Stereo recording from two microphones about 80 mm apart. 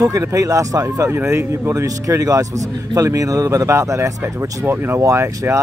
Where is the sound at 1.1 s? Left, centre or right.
Right.